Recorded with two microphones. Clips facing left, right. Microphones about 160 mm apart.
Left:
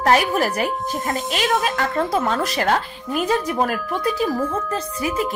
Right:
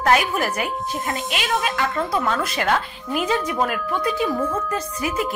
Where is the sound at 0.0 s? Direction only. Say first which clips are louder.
Left 2 dB; 40° left (ahead or behind).